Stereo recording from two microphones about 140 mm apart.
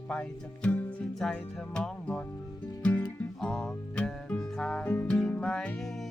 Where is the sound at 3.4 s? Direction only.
5° left (ahead or behind).